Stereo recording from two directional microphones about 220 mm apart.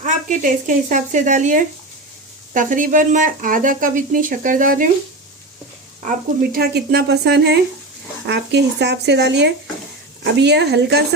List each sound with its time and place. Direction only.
0.0 s speech: 35° right (ahead or behind)
6.1 s speech: 45° right (ahead or behind)